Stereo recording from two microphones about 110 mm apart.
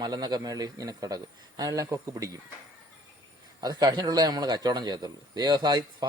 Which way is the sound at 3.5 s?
40° right (ahead or behind).